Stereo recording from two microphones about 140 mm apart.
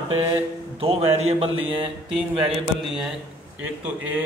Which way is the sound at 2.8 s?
5° right (ahead or behind).